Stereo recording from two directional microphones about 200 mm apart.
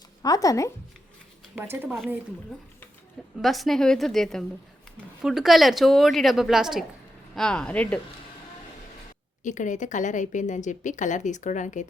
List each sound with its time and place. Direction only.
0.2 s speech: 15° left (ahead or behind)
1.5 s a woman's voice: 10° right (ahead or behind)
3.3 s a woman's voice: centre (ahead or behind)
9.4 s speech: 40° left (ahead or behind)